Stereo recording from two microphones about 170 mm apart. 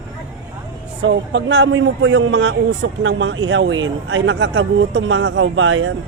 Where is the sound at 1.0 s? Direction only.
90° right.